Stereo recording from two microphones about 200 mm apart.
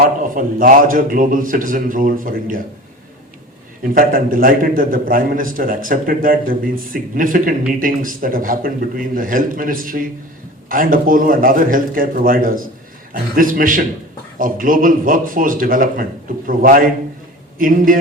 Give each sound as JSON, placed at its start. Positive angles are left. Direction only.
{"t": 0.0, "sound": "a man's voice", "side_deg": -45}
{"t": 3.9, "sound": "a man's voice", "side_deg": -45}